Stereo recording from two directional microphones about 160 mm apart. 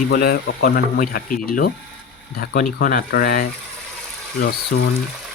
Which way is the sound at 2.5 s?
80° left.